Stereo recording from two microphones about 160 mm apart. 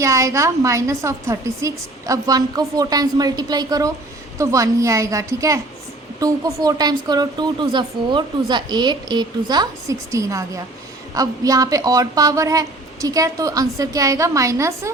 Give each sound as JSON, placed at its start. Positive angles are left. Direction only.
{"t": 0.0, "sound": "speech", "side_deg": -20}